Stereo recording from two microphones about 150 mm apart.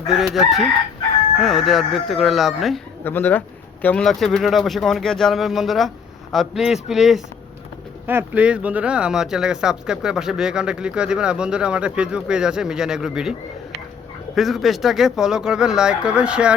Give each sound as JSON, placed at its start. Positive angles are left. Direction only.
{"t": 0.1, "sound": "speech", "side_deg": 0}
{"t": 3.0, "sound": "speech", "side_deg": 15}
{"t": 8.0, "sound": "speech", "side_deg": -10}
{"t": 14.3, "sound": "speech", "side_deg": 0}